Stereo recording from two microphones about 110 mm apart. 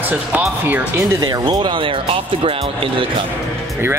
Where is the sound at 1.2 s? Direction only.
40° right (ahead or behind); by 3.0 s 55° right (ahead or behind).